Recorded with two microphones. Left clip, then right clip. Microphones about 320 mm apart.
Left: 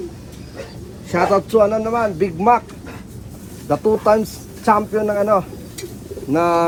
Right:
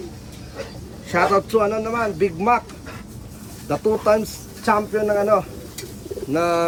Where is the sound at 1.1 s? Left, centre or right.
Centre.